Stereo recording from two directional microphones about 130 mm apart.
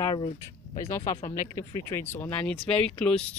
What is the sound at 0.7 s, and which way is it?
Speech, 20° left (ahead or behind).